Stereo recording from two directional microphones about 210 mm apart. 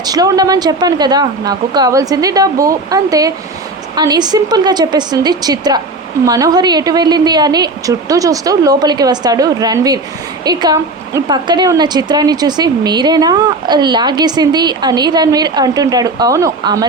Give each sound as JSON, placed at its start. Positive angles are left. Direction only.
{"t": 0.0, "sound": "a woman's voice", "side_deg": -20}